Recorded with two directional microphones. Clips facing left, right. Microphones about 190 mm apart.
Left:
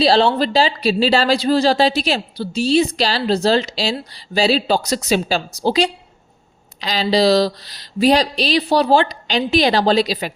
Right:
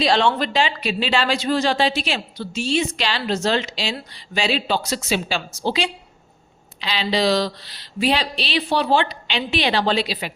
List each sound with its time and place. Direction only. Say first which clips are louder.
0.0 s speech: left 4 dB; 35° left (ahead or behind)